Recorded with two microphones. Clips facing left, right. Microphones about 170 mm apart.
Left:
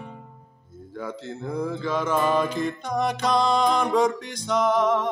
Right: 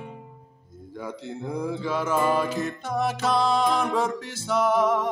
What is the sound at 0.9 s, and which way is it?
Mantra, 10° right (ahead or behind).